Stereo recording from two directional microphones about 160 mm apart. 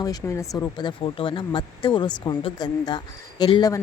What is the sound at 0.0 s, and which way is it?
Speech, 20° left (ahead or behind).